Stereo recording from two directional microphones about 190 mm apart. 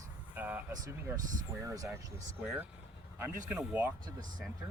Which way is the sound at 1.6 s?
20° right (ahead or behind).